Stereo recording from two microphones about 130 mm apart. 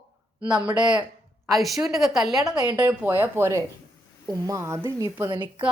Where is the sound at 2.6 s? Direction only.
30° right (ahead or behind).